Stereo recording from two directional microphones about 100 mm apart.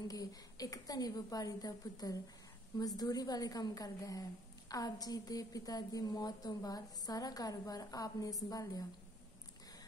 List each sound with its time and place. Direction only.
0.1 s a woman's voice: 40° left (ahead or behind)